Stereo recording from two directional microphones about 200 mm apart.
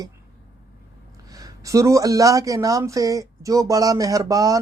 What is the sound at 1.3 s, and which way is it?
Speech, 20° right (ahead or behind).